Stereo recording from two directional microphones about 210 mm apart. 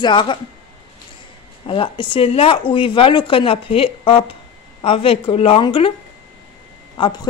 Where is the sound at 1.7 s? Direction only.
25° left (ahead or behind).